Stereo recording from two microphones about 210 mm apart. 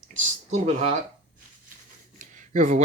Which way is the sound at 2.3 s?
35° right (ahead or behind).